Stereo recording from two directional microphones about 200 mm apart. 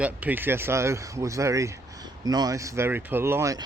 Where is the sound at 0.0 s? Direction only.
10° right (ahead or behind).